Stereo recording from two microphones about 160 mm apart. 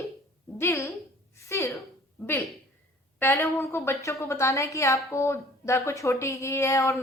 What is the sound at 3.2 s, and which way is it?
A woman's voice, 15° left (ahead or behind).